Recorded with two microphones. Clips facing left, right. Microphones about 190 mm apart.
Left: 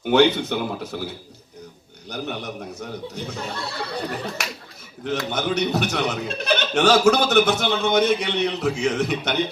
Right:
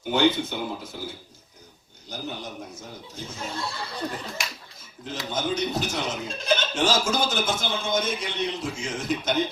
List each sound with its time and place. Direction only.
0.1 s speech: 65° left (ahead or behind)